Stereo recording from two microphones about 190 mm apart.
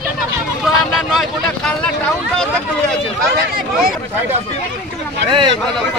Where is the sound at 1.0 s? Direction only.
Centre (ahead or behind).